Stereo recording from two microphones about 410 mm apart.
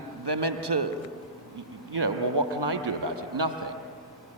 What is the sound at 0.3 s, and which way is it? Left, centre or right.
Speech, right.